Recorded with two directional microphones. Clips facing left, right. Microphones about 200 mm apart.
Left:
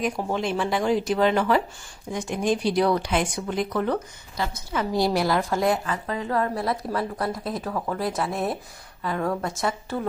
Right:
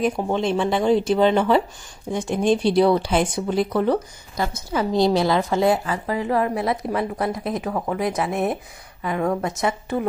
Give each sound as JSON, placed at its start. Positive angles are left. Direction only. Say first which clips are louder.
{"t": 0.0, "sound": "speech", "louder": "right 4 dB", "side_deg": -25}
{"t": 6.2, "sound": "a woman's voice", "louder": "right 3 dB", "side_deg": -20}